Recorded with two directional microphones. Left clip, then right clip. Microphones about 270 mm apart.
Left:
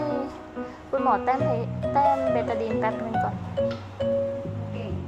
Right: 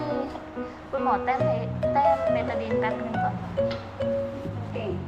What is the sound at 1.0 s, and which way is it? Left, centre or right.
Music, left.